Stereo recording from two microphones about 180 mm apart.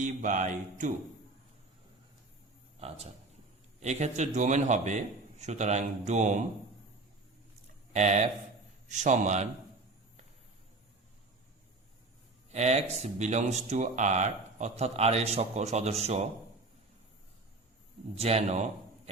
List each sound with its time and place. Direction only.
0.0 s music: 45° right (ahead or behind)
2.8 s speech: 35° right (ahead or behind)
7.9 s speech: 40° right (ahead or behind)
12.5 s speech: 40° right (ahead or behind)
18.1 s speech: 35° right (ahead or behind)